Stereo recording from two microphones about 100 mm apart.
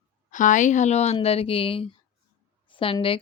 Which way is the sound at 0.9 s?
90° left.